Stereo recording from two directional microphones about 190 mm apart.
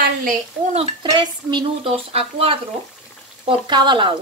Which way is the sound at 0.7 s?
25° right (ahead or behind).